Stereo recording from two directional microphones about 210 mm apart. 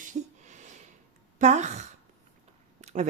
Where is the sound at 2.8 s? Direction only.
35° right (ahead or behind).